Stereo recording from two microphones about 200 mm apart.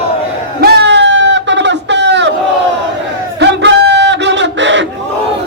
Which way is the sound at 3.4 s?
60° right (ahead or behind).